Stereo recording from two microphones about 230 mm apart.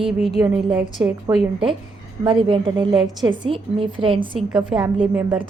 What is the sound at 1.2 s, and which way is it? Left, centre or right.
A woman's voice, right.